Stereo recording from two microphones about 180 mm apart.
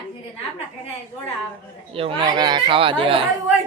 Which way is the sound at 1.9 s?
30° right (ahead or behind).